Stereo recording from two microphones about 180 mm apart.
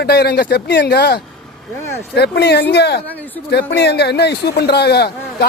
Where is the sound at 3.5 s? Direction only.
65° left (ahead or behind).